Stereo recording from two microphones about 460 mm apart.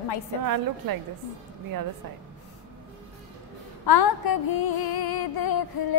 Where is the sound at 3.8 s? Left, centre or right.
Left.